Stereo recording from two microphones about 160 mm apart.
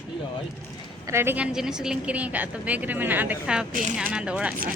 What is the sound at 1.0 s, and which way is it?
Speech, 15° right (ahead or behind).